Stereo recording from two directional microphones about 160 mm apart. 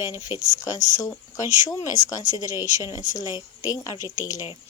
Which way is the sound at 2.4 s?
20° left (ahead or behind).